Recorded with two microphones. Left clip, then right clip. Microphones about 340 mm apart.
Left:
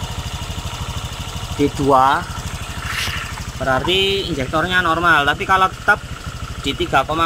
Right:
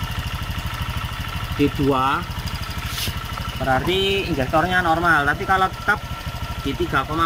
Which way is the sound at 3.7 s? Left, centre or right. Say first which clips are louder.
Left 3 dB; centre.